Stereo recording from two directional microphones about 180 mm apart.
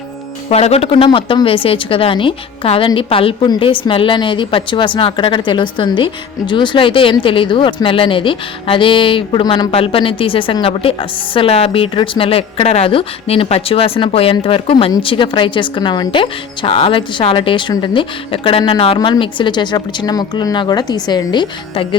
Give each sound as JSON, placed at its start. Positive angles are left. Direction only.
{"t": 0.5, "sound": "speech", "side_deg": 35}